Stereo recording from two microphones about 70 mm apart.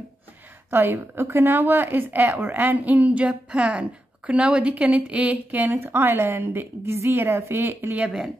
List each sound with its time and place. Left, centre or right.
0.7 s speech: right